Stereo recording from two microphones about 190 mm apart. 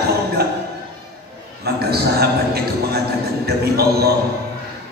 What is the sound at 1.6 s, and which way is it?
A man's voice, 55° right (ahead or behind).